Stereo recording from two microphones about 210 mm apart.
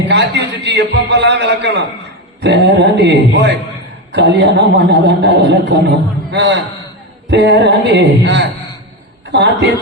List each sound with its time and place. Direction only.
0.1 s a man's voice: 55° right (ahead or behind)